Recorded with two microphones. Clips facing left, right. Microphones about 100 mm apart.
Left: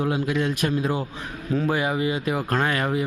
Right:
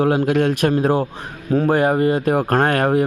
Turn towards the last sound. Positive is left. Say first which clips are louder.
# right 7 dB
turn(degrees=-55)  # may be behind; listen again after turning